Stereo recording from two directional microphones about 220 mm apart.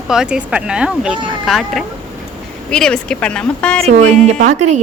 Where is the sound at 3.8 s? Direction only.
30° right (ahead or behind).